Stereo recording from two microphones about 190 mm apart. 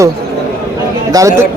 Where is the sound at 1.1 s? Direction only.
20° right (ahead or behind).